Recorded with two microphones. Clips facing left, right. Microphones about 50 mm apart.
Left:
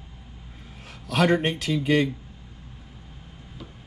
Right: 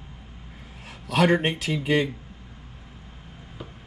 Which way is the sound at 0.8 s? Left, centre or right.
Right.